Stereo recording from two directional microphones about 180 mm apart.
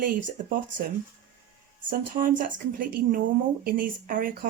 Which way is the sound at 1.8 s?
50° right (ahead or behind).